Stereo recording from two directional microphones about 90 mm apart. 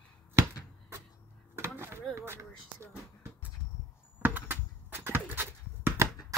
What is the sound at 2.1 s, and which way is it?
Speech, 30° right (ahead or behind).